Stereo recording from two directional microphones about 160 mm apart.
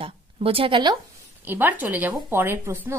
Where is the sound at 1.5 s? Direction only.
10° right (ahead or behind).